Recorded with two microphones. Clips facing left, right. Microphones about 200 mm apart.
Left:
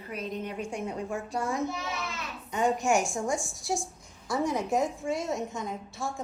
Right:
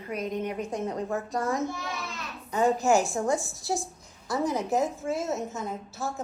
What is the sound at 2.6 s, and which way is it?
A woman's voice, centre (ahead or behind).